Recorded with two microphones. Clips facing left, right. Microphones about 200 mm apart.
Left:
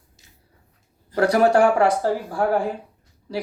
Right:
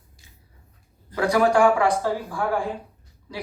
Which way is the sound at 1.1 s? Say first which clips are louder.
Left 3 dB; 40° left (ahead or behind).